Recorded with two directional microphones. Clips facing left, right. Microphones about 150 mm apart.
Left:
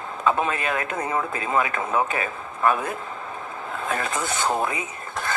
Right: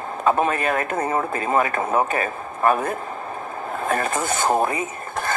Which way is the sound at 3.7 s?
50° right (ahead or behind).